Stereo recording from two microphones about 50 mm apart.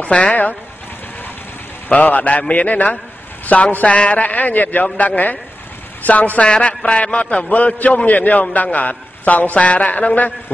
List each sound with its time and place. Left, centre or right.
0.0 s speech: left
1.9 s a man's voice: left